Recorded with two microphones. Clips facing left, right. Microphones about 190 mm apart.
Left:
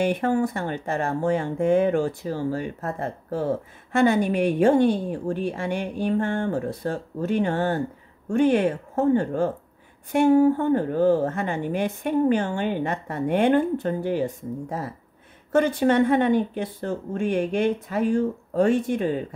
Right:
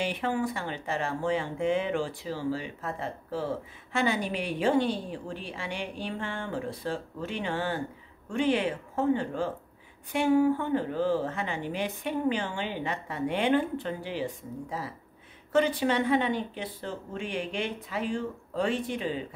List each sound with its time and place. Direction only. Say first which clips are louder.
0.0 s speech: left 7 dB; 50° left (ahead or behind)